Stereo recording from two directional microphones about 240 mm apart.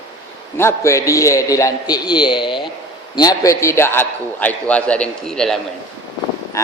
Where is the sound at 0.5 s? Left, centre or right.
Centre.